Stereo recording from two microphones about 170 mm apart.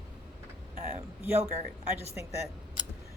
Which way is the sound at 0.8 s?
15° right (ahead or behind).